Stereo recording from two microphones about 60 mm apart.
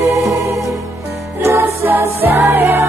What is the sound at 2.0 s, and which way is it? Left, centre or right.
Music, right.